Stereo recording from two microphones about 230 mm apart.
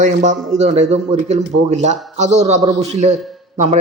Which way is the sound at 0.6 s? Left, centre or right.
Right.